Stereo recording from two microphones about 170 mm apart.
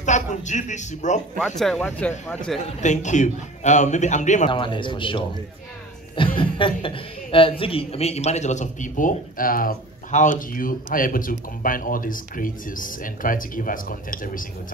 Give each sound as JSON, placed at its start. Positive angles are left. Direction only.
{"t": 0.0, "sound": "speech", "side_deg": 45}
{"t": 1.6, "sound": "speech", "side_deg": 5}
{"t": 2.8, "sound": "speech", "side_deg": 45}
{"t": 4.5, "sound": "a woman's voice", "side_deg": 30}